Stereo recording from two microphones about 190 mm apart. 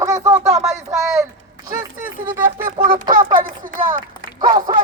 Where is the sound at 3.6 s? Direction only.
45° right (ahead or behind).